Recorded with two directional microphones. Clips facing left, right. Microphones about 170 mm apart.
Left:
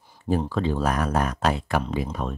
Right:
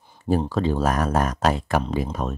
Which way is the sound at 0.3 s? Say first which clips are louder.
Right 2 dB; 40° right (ahead or behind).